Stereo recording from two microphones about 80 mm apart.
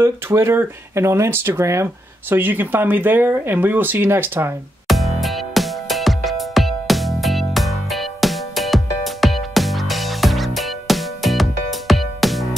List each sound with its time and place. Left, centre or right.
0.0 s speech: right
4.8 s music: centre